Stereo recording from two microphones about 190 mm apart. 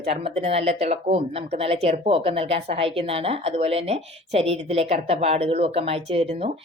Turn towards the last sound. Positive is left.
turn(degrees=-35)  # may be behind; listen again after turning